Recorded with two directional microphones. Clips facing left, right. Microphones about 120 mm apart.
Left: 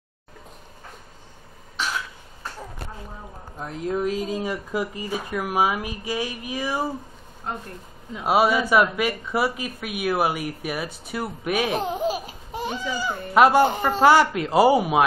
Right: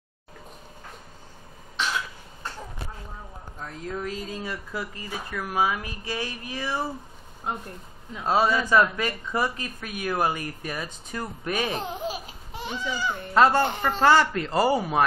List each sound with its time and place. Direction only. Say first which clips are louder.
3.5 s speech: left 7 dB; 20° left (ahead or behind)
8.1 s speech: left 3 dB; 10° left (ahead or behind)
12.5 s a sound: left 5 dB; 40° left (ahead or behind)
12.8 s speech: left 2 dB; 10° left (ahead or behind)